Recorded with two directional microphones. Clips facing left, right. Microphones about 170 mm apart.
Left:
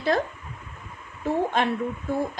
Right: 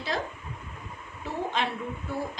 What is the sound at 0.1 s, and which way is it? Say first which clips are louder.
A woman's voice: left 6 dB; 50° left (ahead or behind).